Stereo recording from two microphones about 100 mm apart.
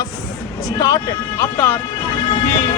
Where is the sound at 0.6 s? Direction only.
35° left (ahead or behind).